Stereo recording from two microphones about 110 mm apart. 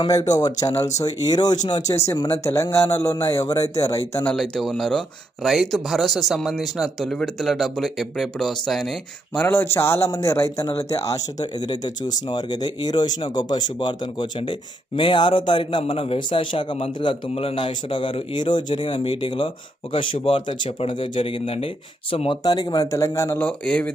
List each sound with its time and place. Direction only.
0.0 s speech: 35° left (ahead or behind)
2.4 s speech: 25° left (ahead or behind)
4.4 s speech: 5° left (ahead or behind)
9.4 s a man's voice: 20° left (ahead or behind); by 22.4 s 55° left (ahead or behind)
22.4 s speech: 35° left (ahead or behind); by 23.9 s 10° left (ahead or behind)